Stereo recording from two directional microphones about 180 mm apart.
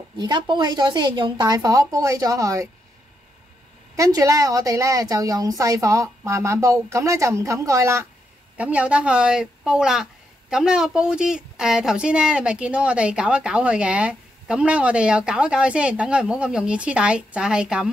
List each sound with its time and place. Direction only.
0.2 s a woman's voice: 25° right (ahead or behind)
3.9 s a woman's voice: 20° right (ahead or behind)